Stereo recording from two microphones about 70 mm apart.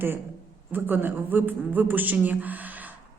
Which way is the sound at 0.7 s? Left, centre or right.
Right.